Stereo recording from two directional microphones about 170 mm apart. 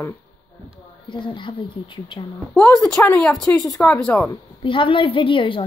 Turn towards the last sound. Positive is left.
turn(degrees=30)  # may be behind; listen again after turning